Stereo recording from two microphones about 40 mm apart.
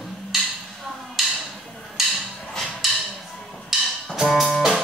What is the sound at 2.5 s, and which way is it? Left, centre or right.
Wood block, centre.